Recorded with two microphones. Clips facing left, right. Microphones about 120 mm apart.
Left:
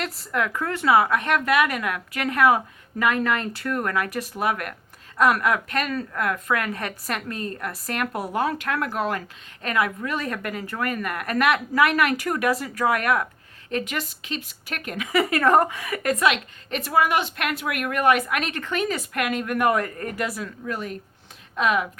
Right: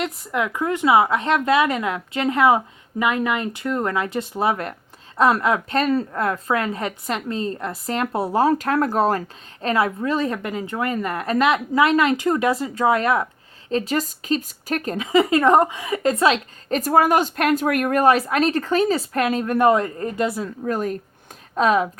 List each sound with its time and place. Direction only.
0.0 s a woman's voice: 15° right (ahead or behind)
20.7 s speech: 45° right (ahead or behind)